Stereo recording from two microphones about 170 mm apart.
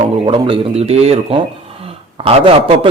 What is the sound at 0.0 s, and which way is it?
Speech, 30° right (ahead or behind).